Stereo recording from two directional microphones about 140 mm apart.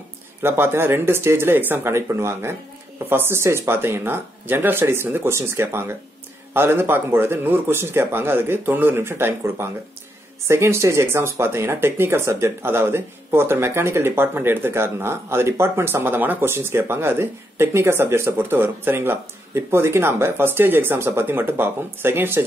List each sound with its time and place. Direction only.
0.4 s speech: 15° right (ahead or behind)